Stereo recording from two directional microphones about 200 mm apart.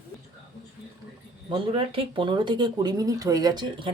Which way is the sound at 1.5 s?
25° right (ahead or behind).